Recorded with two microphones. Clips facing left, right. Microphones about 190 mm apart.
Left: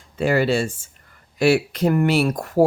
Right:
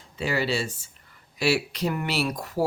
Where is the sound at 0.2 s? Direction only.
50° left (ahead or behind).